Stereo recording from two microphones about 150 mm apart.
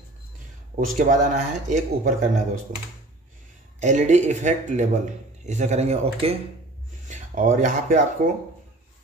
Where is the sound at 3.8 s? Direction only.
50° right (ahead or behind).